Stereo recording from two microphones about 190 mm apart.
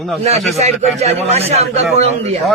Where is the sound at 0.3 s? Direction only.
35° right (ahead or behind).